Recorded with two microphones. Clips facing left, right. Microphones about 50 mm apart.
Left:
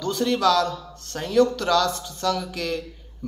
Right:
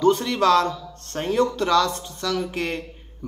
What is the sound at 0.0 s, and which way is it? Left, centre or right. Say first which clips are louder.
Speech: right 3 dB; right.